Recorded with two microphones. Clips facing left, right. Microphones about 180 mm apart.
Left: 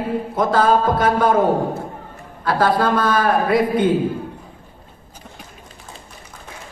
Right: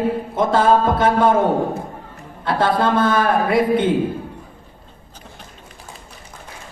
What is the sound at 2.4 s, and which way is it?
A man's voice, 25° right (ahead or behind).